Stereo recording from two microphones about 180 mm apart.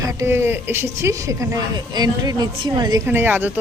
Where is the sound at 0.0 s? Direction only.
15° right (ahead or behind).